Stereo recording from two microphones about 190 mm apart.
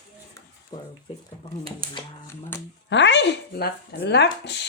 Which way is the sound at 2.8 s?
70° left (ahead or behind).